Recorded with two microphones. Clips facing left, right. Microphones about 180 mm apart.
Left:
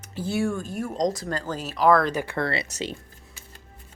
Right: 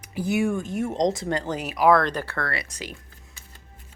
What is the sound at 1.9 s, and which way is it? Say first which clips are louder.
Speech: even; 5° left (ahead or behind).